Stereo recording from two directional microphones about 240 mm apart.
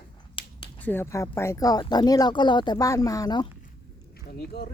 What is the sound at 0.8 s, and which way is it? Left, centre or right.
Speech, centre.